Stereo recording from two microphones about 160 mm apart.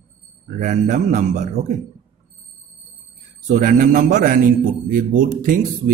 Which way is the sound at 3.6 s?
55° right (ahead or behind).